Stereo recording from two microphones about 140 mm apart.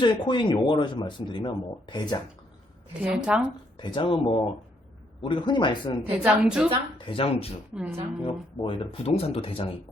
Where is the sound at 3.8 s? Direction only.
35° left (ahead or behind).